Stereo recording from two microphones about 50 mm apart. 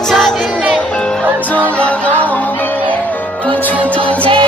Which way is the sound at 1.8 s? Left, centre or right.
Left.